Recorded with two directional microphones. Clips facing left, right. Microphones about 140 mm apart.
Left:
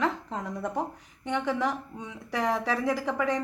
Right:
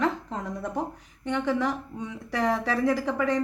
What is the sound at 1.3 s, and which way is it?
Speech, 15° left (ahead or behind).